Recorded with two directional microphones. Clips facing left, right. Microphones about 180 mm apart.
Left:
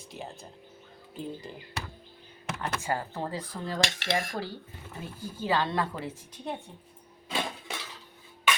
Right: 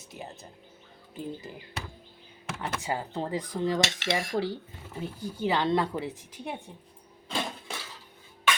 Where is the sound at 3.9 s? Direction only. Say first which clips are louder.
Right 1 dB; 50° left (ahead or behind).